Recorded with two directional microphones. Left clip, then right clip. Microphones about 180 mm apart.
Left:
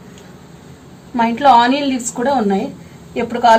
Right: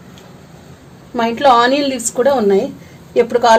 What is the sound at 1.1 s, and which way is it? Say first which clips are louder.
Speech: left 1 dB; 70° right (ahead or behind).